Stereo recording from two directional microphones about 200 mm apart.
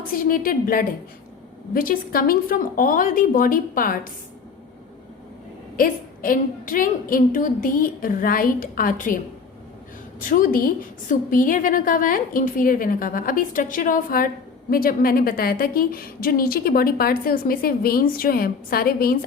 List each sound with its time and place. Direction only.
0.1 s a woman's voice: 45° left (ahead or behind)
5.7 s a woman's voice: 45° left (ahead or behind)